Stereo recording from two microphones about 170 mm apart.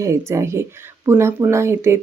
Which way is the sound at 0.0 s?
15° right (ahead or behind).